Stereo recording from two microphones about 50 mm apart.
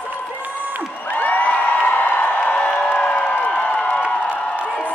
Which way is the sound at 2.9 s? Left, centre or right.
Left.